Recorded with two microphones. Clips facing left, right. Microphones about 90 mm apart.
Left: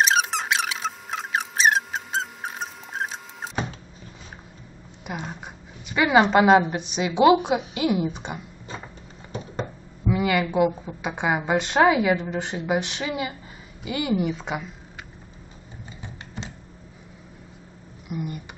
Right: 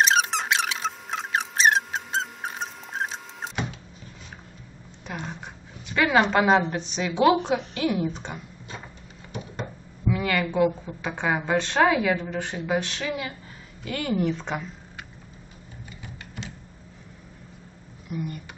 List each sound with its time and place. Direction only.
0.0 s a sound: centre (ahead or behind)
5.0 s a sound: 15° left (ahead or behind)
5.3 s a woman's voice: 10° left (ahead or behind)
10.0 s a woman's voice: 15° left (ahead or behind)
16.0 s typewriter: 30° left (ahead or behind)
18.0 s speech: 15° left (ahead or behind)